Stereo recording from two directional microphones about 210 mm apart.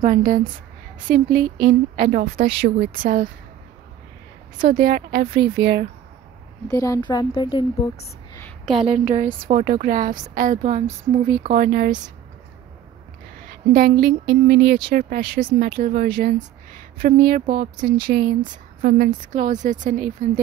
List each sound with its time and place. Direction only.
0.0 s a woman's voice: 40° right (ahead or behind)
4.6 s a woman's voice: 45° right (ahead or behind)
6.7 s a woman's voice: 15° left (ahead or behind)
8.4 s a sound: 5° left (ahead or behind)
8.7 s a woman's voice: 30° right (ahead or behind)
11.4 s a woman's voice: 45° right (ahead or behind)
13.5 s a woman's voice: 40° right (ahead or behind)